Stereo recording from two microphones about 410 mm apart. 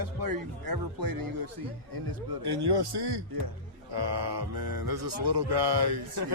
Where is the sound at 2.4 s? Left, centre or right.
Right.